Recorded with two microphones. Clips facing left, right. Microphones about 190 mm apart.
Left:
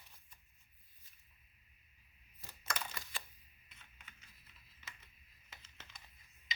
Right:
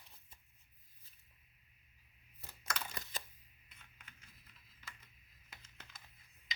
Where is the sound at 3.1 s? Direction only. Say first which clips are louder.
Right 2 dB; 40° right (ahead or behind).